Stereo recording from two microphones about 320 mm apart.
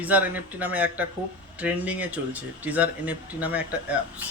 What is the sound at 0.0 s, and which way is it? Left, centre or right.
Speech, centre.